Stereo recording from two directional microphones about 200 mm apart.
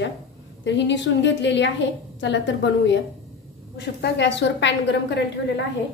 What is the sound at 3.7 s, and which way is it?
A woman's voice, 60° left (ahead or behind).